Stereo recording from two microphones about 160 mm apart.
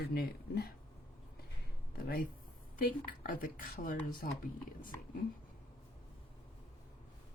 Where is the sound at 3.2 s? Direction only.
60° left (ahead or behind).